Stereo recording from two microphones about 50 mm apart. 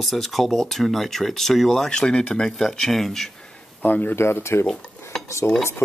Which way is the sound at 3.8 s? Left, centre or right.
Left.